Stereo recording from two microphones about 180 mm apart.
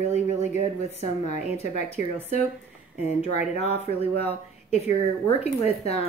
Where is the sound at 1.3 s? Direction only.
40° left (ahead or behind).